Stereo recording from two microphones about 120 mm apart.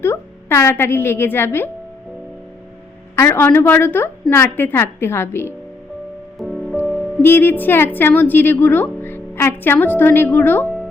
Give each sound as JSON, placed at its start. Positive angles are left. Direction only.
{"t": 0.0, "sound": "a woman's voice", "side_deg": 20}
{"t": 3.2, "sound": "a woman's voice", "side_deg": 20}
{"t": 6.4, "sound": "music", "side_deg": 0}
{"t": 7.2, "sound": "a woman's voice", "side_deg": 15}